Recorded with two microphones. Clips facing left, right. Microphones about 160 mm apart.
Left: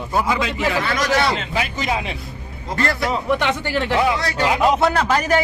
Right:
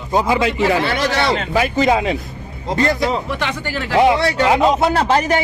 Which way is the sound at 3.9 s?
25° right (ahead or behind).